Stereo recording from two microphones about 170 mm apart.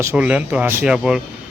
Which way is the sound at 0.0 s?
10° right (ahead or behind).